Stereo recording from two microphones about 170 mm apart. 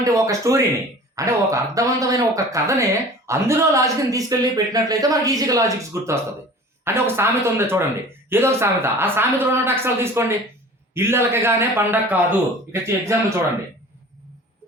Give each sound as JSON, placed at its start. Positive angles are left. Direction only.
{"t": 0.0, "sound": "speech", "side_deg": -20}